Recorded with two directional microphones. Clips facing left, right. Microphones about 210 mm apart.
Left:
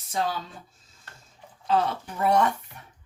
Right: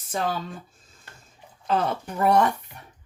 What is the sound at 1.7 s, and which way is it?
Speech, 50° right (ahead or behind).